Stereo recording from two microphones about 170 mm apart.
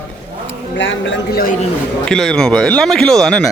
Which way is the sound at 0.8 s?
90° left.